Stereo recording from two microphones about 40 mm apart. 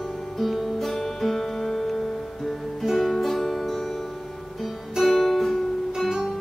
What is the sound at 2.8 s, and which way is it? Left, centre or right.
Music, centre.